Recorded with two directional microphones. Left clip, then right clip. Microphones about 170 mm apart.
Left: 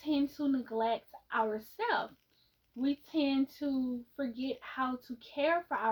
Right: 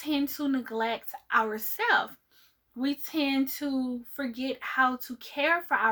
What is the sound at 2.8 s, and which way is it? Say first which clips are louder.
Speech: right 3 dB; 40° right (ahead or behind).